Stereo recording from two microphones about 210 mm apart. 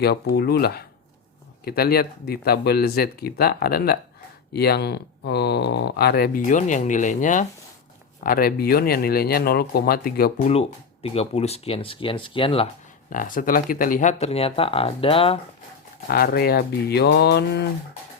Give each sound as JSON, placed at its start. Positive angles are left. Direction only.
{"t": 0.0, "sound": "speech", "side_deg": 50}
{"t": 13.1, "sound": "speech", "side_deg": 40}
{"t": 16.0, "sound": "speech", "side_deg": 45}